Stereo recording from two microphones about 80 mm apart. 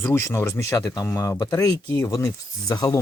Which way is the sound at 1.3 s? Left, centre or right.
Left.